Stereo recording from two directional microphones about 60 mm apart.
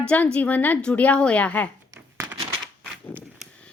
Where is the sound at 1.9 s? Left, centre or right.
Right.